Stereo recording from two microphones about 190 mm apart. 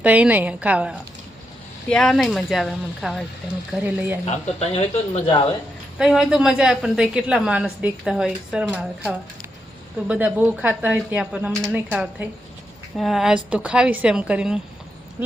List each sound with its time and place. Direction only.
0.0 s speech: 10° right (ahead or behind)
1.9 s a woman's voice: 5° left (ahead or behind)
4.3 s speech: 35° left (ahead or behind)
6.0 s a woman's voice: 5° right (ahead or behind)